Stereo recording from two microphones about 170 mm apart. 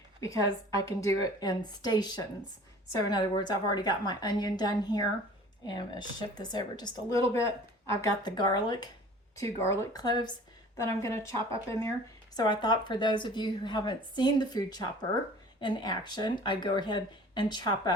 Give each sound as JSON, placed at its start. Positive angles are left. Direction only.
{"t": 0.2, "sound": "speech", "side_deg": 20}